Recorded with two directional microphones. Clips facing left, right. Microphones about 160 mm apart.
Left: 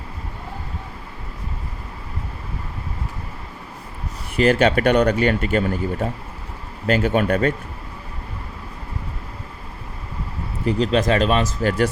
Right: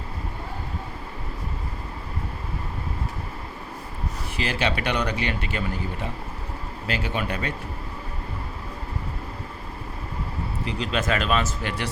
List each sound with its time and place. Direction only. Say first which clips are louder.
4.4 s speech: left 11 dB; 50° left (ahead or behind)
10.7 s speech: left 8 dB; 40° left (ahead or behind)